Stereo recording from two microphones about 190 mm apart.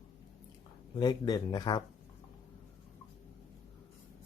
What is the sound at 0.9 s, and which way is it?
Speech, 20° left (ahead or behind).